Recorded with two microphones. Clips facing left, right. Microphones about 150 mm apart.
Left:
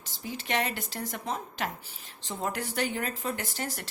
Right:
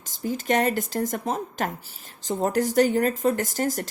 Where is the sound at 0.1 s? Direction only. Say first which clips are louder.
Right 8 dB; 45° right (ahead or behind).